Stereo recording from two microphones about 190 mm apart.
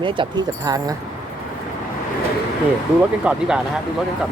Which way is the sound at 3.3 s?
5° right (ahead or behind).